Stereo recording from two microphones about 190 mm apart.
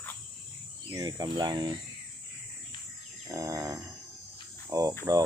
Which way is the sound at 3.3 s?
15° right (ahead or behind).